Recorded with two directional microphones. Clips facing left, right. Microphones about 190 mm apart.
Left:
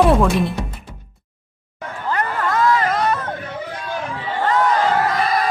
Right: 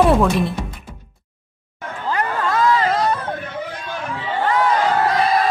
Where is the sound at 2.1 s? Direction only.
15° right (ahead or behind).